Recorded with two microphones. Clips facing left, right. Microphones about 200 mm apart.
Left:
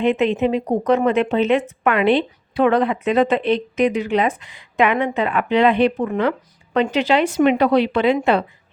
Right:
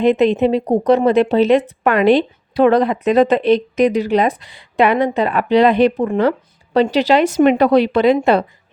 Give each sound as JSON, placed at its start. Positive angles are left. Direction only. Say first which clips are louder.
{"t": 0.0, "sound": "speech", "louder": "right 4 dB", "side_deg": -35}